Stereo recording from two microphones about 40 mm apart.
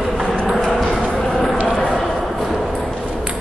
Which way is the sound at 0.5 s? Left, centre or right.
Centre.